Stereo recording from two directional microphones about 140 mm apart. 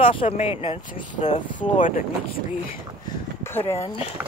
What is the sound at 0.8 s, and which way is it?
Speech, 60° left (ahead or behind).